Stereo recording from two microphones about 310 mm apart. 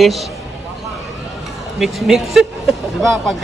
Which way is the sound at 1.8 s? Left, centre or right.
Centre.